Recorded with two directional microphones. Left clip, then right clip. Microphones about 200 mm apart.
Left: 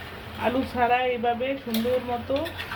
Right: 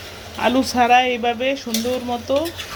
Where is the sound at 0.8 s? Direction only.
55° right (ahead or behind).